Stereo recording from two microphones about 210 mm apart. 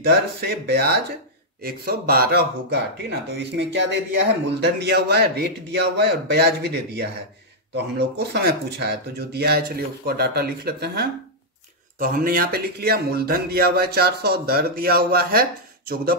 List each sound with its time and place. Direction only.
0.0 s speech: 50° right (ahead or behind)